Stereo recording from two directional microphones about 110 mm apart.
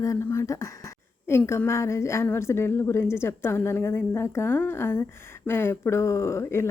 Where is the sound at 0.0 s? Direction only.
25° left (ahead or behind).